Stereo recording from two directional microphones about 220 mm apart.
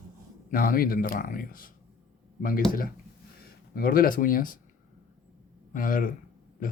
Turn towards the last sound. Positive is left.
turn(degrees=40)  # may be behind; listen again after turning